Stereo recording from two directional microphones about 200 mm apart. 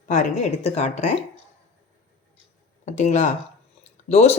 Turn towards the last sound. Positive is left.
turn(degrees=30)  # may be behind; listen again after turning